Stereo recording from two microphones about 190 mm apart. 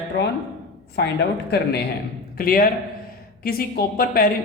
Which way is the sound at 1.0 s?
60° left (ahead or behind).